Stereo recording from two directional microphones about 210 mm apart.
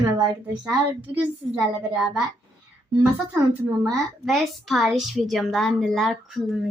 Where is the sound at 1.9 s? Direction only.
5° right (ahead or behind).